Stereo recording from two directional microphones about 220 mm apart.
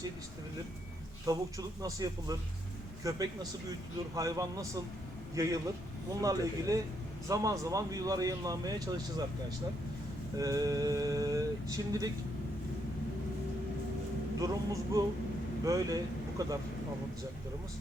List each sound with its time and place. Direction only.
1.2 s a man's voice: 15° right (ahead or behind)
10.3 s speech: 15° right (ahead or behind)
14.4 s speech: 15° right (ahead or behind)